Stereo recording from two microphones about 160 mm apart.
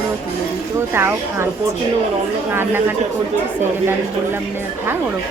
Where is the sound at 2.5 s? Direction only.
15° right (ahead or behind).